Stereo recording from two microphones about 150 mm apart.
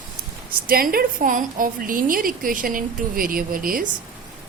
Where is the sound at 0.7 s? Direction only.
80° right.